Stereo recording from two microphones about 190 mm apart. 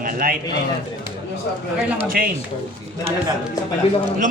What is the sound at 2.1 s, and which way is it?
Speech, 50° right (ahead or behind).